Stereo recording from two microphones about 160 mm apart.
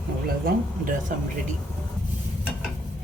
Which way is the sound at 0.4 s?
60° right (ahead or behind).